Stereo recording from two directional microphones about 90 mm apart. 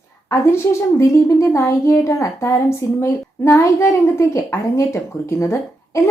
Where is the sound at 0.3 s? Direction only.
35° left (ahead or behind).